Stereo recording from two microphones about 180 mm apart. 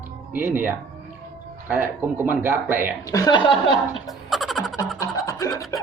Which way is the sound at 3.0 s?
20° left (ahead or behind).